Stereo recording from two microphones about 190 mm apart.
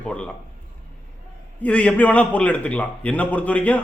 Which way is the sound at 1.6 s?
5° left (ahead or behind).